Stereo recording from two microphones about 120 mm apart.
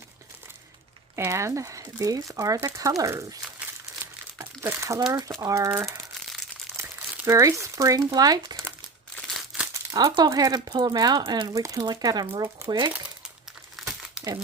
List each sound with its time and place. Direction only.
1.1 s speech: 25° right (ahead or behind)
4.0 s crumpling: 20° right (ahead or behind)
5.4 s speech: 30° right (ahead or behind)
9.9 s speech: 30° right (ahead or behind)
13.7 s crumpling: centre (ahead or behind)